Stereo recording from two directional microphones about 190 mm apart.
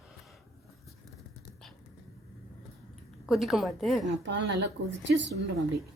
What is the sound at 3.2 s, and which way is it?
Speech, centre (ahead or behind).